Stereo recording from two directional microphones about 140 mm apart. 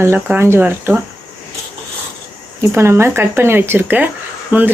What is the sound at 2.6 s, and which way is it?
Speech, 15° right (ahead or behind).